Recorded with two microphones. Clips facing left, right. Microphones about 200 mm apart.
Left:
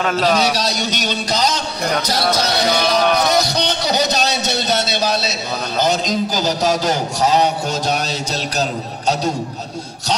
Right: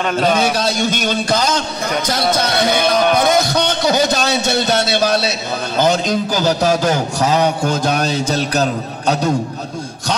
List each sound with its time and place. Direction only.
0.0 s a man's voice: centre (ahead or behind)
0.4 s a man's voice: 50° right (ahead or behind)